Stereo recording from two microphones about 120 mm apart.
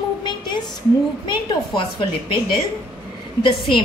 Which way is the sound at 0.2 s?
40° left (ahead or behind).